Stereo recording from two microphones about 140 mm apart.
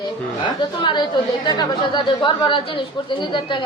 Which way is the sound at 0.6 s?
35° left (ahead or behind).